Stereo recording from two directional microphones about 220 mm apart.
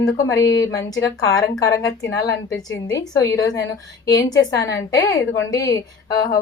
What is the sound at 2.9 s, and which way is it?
A woman's voice, 15° left (ahead or behind).